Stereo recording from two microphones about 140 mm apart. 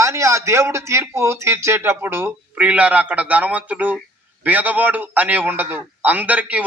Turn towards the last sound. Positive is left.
turn(degrees=-10)  # may be behind; listen again after turning